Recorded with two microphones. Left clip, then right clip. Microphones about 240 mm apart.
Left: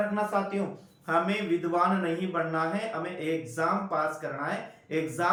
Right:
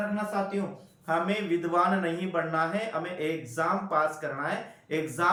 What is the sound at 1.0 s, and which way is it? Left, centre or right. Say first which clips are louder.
Speech: left 1 dB; centre.